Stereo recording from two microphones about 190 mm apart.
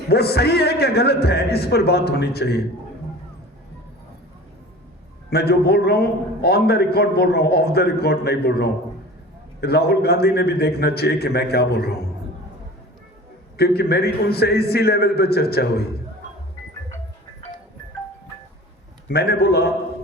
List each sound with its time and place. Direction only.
0.1 s a man's voice: 55° left (ahead or behind)
5.3 s a man's voice: 55° left (ahead or behind)
13.6 s a man's voice: 55° left (ahead or behind)
19.0 s a man's voice: 55° left (ahead or behind)